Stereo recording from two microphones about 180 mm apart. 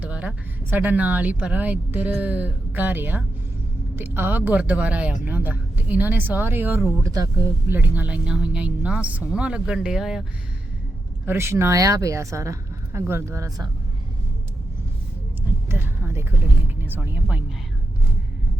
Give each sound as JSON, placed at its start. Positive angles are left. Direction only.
{"t": 0.0, "sound": "speech", "side_deg": -5}
{"t": 11.3, "sound": "speech", "side_deg": -15}
{"t": 15.7, "sound": "speech", "side_deg": -10}